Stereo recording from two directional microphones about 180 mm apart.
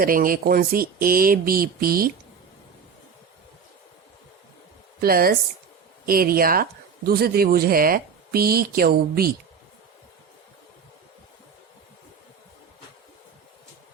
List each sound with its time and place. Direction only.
0.0 s speech: 50° right (ahead or behind)
4.9 s speech: 55° right (ahead or behind)